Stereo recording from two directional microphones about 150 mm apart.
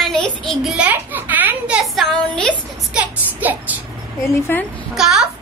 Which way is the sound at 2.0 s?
5° left (ahead or behind).